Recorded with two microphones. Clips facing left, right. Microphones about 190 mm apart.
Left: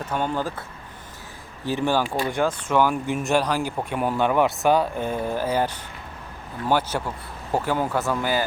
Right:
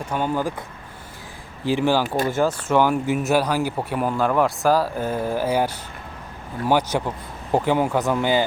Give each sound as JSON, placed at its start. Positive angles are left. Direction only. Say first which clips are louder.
{"t": 0.0, "sound": "speech", "louder": "right 2 dB", "side_deg": -10}
{"t": 1.6, "sound": "speech", "louder": "right 3 dB", "side_deg": -10}
{"t": 2.0, "sound": "speech", "louder": "right 3 dB", "side_deg": -45}
{"t": 2.3, "sound": "speech", "louder": "right 2 dB", "side_deg": -5}